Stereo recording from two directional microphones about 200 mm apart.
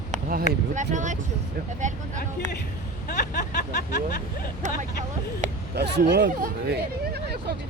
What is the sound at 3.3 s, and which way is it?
Music, 55° left (ahead or behind).